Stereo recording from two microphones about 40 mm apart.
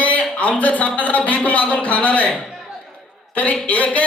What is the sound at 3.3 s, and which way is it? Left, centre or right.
Speech, left.